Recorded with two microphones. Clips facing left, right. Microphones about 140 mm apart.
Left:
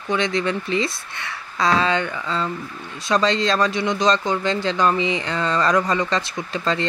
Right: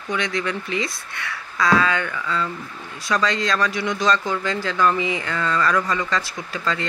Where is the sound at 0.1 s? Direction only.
25° left (ahead or behind).